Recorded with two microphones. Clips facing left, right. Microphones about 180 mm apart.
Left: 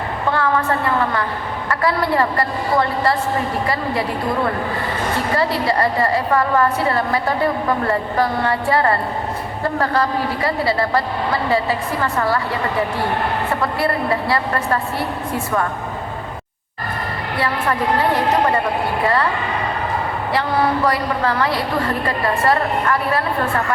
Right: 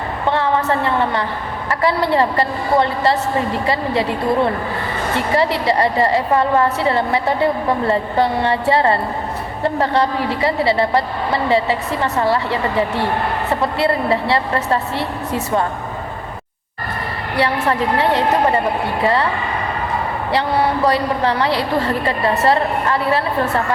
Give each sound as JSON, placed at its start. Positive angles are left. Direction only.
{"t": 0.3, "sound": "a woman's voice", "side_deg": -25}
{"t": 5.1, "sound": "a woman's voice", "side_deg": -25}
{"t": 17.3, "sound": "a woman's voice", "side_deg": -25}
{"t": 20.8, "sound": "a woman's voice", "side_deg": -25}